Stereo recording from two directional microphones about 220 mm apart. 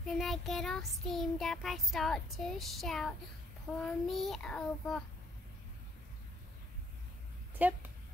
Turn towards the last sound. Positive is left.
turn(degrees=-10)  # may be behind; listen again after turning